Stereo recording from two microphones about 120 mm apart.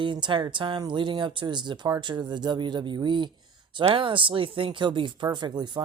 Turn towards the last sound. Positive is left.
turn(degrees=-35)  # may be behind; listen again after turning